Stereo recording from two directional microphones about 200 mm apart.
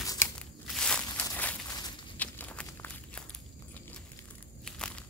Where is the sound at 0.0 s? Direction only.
15° left (ahead or behind).